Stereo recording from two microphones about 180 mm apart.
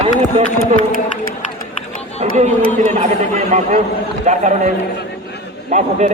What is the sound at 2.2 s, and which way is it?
A man's voice, 35° right (ahead or behind).